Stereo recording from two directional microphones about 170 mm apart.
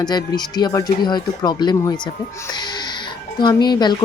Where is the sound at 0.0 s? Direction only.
25° left (ahead or behind).